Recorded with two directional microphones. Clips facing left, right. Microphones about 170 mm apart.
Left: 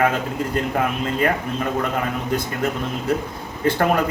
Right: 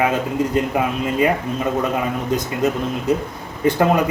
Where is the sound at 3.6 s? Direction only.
15° right (ahead or behind).